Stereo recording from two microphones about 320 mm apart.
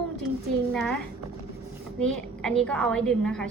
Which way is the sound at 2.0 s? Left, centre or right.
Centre.